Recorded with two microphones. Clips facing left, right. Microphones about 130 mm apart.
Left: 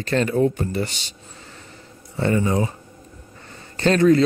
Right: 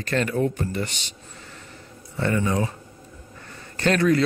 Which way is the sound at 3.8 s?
25° left (ahead or behind).